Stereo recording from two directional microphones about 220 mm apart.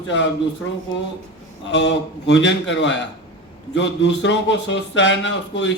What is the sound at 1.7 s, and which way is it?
Speech, 55° left (ahead or behind).